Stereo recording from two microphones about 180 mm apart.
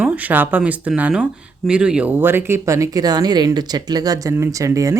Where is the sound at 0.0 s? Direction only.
10° right (ahead or behind).